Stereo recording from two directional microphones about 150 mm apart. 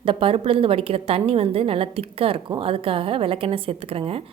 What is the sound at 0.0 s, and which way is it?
A woman's voice, 35° right (ahead or behind).